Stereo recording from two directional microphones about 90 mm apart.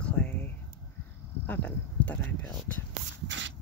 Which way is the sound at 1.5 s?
20° left (ahead or behind).